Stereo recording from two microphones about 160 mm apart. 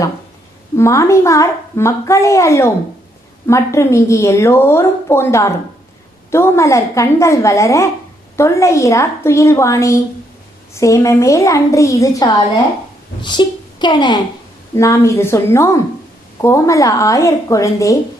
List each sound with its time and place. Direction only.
0.8 s a woman's voice: 20° left (ahead or behind)